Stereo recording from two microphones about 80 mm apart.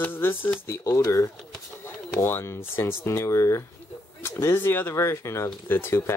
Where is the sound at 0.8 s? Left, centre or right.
Left.